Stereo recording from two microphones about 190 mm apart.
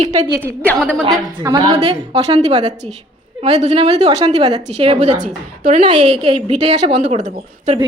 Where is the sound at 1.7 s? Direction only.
35° right (ahead or behind).